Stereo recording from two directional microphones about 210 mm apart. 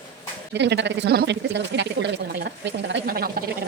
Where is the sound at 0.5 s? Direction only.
55° right (ahead or behind).